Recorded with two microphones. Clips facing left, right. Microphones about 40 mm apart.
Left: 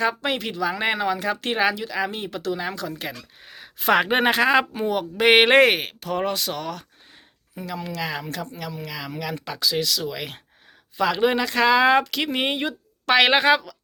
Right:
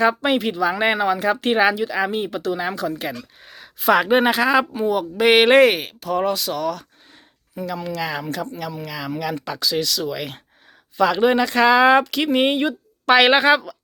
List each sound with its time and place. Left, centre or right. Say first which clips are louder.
0.0 s speech: right 6 dB; centre
3.4 s a sound: right 1 dB; centre
3.8 s speech: right 3 dB; left
7.5 s speech: right 4 dB; centre